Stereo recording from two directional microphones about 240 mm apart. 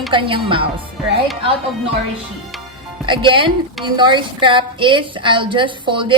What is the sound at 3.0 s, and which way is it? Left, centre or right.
A woman's voice, centre.